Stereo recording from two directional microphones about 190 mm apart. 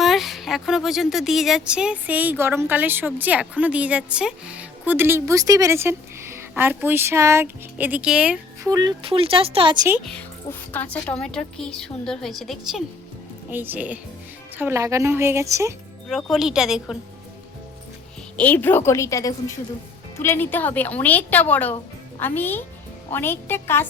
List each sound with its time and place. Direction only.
0.0 s speech: centre (ahead or behind)
8.6 s speech: 20° right (ahead or behind)
10.2 s a woman's voice: 10° left (ahead or behind)
13.5 s speech: 10° right (ahead or behind)
16.0 s a woman's voice: centre (ahead or behind)
18.3 s speech: 10° left (ahead or behind)